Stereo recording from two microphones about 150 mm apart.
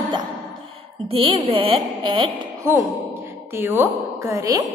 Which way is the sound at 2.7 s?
15° right (ahead or behind).